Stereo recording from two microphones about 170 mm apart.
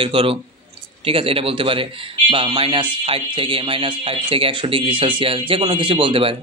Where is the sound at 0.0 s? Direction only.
30° right (ahead or behind).